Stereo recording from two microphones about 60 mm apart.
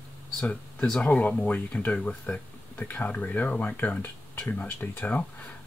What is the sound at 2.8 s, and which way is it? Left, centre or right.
Speech, left.